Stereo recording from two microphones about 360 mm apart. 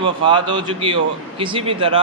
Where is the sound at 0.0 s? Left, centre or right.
Centre.